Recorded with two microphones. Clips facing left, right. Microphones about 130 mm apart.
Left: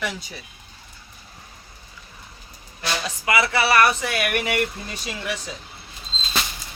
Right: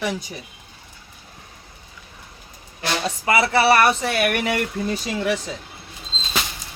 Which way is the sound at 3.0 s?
30° right (ahead or behind).